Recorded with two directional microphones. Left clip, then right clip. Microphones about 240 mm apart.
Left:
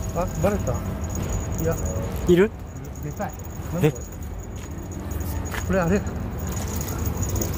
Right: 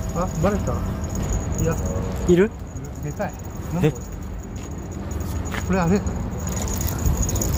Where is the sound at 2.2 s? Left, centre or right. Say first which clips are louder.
Even; centre.